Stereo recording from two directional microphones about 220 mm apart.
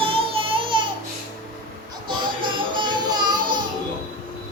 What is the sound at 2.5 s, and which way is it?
Music, 20° right (ahead or behind).